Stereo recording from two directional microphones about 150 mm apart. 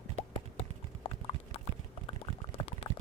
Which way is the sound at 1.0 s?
40° left (ahead or behind).